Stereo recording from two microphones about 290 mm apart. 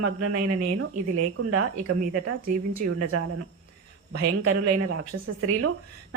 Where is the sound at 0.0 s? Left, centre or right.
Right.